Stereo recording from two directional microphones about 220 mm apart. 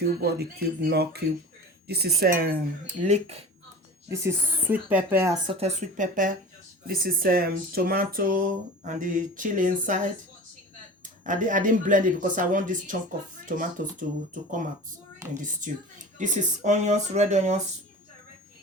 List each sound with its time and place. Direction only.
0.0 s speech: 45° right (ahead or behind); by 3.4 s 30° right (ahead or behind)
4.1 s speech: 10° right (ahead or behind)
5.5 s speech: 30° right (ahead or behind)
11.2 s speech: 35° right (ahead or behind)
15.4 s speech: 35° right (ahead or behind)